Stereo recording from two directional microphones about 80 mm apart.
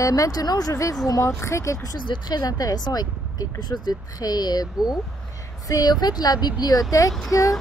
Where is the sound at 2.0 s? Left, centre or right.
Left.